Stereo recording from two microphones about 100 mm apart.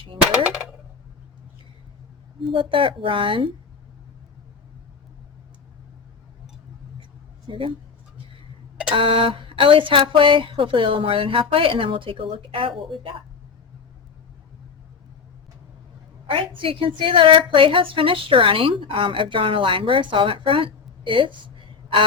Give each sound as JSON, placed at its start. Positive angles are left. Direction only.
{"t": 2.5, "sound": "a woman's voice", "side_deg": -60}
{"t": 7.4, "sound": "speech", "side_deg": -55}
{"t": 9.0, "sound": "a woman's voice", "side_deg": -65}
{"t": 16.2, "sound": "a woman's voice", "side_deg": -60}